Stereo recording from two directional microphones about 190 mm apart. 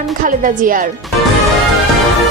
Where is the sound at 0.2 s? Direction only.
45° right (ahead or behind).